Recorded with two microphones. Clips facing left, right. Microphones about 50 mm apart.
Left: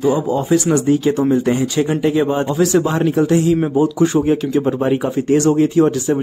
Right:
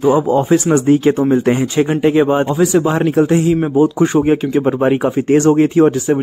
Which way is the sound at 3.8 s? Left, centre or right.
Right.